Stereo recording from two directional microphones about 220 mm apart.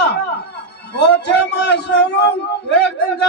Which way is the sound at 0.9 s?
50° left (ahead or behind).